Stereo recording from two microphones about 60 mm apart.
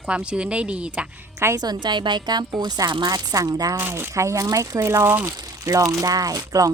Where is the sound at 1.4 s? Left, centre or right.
Right.